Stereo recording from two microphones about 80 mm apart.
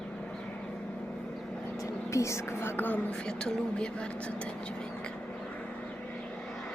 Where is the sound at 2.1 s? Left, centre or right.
Left.